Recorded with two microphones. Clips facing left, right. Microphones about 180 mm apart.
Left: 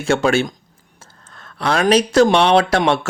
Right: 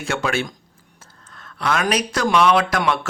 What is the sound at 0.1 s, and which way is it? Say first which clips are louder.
Speech: left 7 dB; 30° left (ahead or behind).